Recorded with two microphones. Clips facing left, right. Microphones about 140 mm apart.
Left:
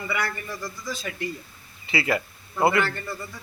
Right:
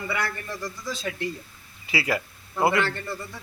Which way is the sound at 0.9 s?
30° right (ahead or behind).